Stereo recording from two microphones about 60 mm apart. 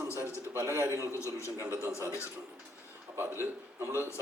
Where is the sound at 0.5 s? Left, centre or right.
Right.